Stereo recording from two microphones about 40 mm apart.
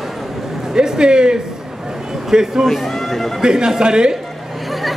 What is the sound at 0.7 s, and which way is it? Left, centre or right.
A man's voice, centre.